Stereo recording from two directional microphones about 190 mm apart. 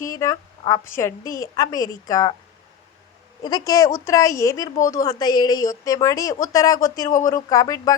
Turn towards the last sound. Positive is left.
turn(degrees=20)  # may be behind; listen again after turning